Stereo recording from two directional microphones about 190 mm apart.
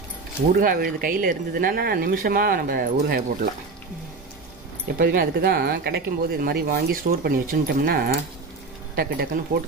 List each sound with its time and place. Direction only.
0.5 s speech: 50° right (ahead or behind)
4.9 s speech: 50° right (ahead or behind)